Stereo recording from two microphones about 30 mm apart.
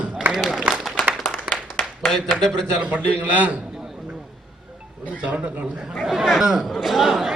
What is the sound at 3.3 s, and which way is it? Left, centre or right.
Speech, right.